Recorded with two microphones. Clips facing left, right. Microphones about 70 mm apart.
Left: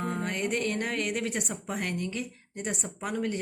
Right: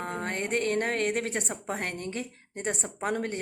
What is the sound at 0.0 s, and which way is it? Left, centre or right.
A woman's voice, right.